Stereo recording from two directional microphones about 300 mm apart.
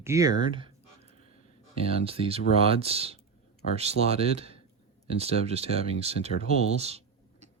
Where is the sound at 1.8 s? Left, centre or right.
Centre.